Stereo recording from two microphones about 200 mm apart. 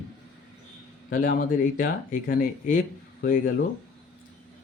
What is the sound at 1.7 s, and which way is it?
Speech, 40° left (ahead or behind).